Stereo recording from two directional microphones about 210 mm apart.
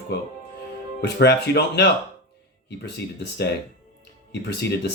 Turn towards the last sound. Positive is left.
turn(degrees=50)  # may be behind; listen again after turning